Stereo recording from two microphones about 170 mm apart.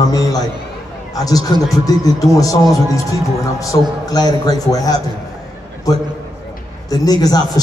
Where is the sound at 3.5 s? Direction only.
20° left (ahead or behind).